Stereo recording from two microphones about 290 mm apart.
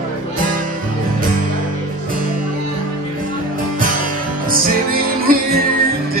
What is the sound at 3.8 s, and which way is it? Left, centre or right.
Music, right.